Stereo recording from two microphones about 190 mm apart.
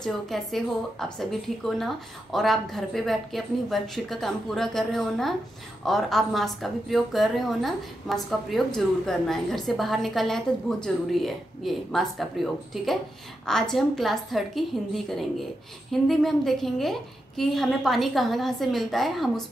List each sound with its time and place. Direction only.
0.0 s a woman's voice: centre (ahead or behind)